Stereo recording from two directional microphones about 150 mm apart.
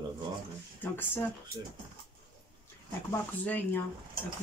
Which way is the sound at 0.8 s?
15° left (ahead or behind).